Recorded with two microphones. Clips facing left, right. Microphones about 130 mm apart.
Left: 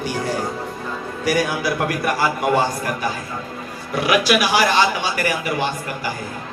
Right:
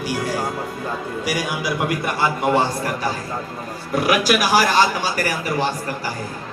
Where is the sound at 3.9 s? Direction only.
45° right (ahead or behind).